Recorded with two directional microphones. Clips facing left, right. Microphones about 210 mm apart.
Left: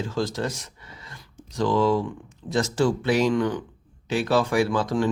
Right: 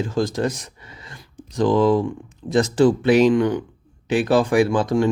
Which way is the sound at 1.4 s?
20° right (ahead or behind).